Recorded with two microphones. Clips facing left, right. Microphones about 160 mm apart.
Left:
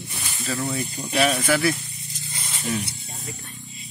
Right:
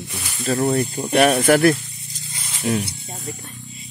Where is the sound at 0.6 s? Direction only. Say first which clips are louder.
Right 8 dB; 60° right (ahead or behind).